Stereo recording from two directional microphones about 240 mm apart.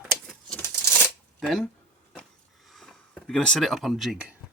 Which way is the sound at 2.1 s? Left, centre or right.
Centre.